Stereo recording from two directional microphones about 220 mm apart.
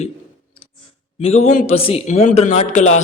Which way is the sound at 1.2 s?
30° left (ahead or behind).